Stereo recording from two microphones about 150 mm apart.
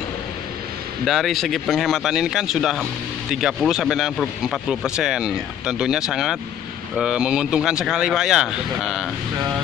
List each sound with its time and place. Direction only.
1.0 s speech: centre (ahead or behind)